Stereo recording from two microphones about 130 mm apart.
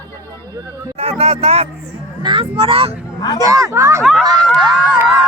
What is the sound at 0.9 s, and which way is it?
Speech, 50° right (ahead or behind).